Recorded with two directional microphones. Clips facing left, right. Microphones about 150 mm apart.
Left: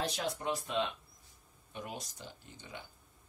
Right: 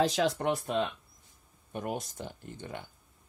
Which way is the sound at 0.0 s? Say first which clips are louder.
Right 9 dB; 90° right.